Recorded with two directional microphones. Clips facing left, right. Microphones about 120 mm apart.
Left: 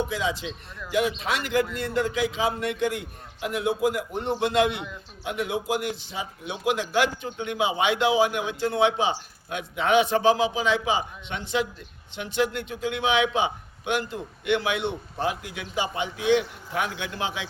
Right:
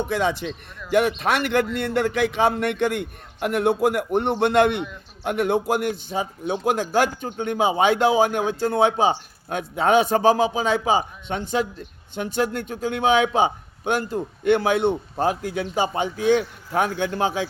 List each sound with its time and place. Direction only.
0.1 s a man's voice: 60° right (ahead or behind); by 17.4 s 45° right (ahead or behind)